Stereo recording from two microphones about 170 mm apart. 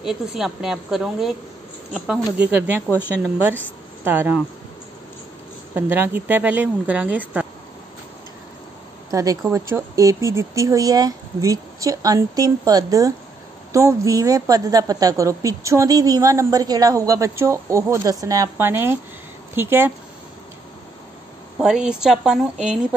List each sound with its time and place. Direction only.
0.0 s a woman's voice: 5° right (ahead or behind)
4.0 s speech: 10° right (ahead or behind)
5.8 s speech: 10° right (ahead or behind)
9.1 s a woman's voice: 20° right (ahead or behind)
21.5 s a woman's voice: 5° right (ahead or behind)